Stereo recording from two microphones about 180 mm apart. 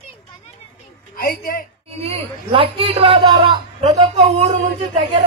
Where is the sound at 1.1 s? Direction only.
55° left (ahead or behind).